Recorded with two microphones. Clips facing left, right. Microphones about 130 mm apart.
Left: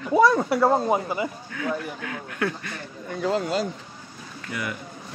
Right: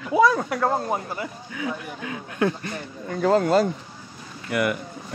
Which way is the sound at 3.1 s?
50° right (ahead or behind).